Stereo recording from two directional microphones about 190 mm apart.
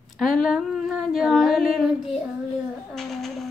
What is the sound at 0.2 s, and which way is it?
Speech, centre (ahead or behind).